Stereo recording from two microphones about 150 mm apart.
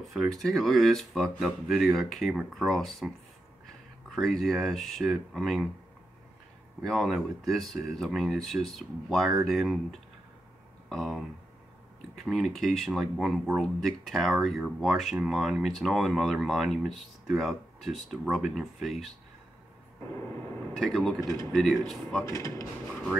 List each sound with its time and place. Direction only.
0.0 s speech: centre (ahead or behind)
4.1 s speech: centre (ahead or behind)
6.8 s speech: centre (ahead or behind)
20.7 s speech: centre (ahead or behind)
22.2 s speech: 20° left (ahead or behind)